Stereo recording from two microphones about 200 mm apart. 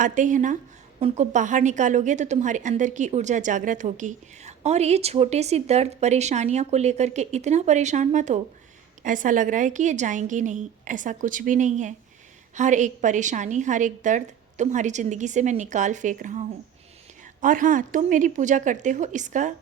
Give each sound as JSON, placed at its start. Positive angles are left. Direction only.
{"t": 0.0, "sound": "a woman's voice", "side_deg": -40}